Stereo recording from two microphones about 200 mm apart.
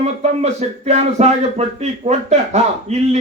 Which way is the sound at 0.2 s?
35° right (ahead or behind).